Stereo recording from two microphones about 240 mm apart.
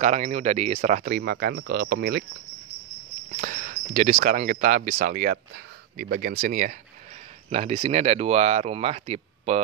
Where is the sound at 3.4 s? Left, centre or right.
Right.